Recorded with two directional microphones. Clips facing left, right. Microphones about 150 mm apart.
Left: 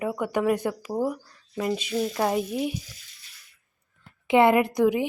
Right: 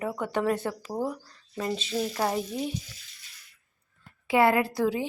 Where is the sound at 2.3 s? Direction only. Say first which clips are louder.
Left 4 dB; 10° left (ahead or behind).